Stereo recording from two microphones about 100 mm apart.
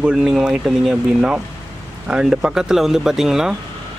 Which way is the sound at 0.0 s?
5° right (ahead or behind).